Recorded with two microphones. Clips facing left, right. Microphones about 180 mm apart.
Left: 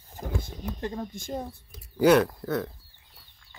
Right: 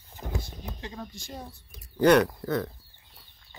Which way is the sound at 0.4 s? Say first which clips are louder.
Left 6 dB; 50° left (ahead or behind).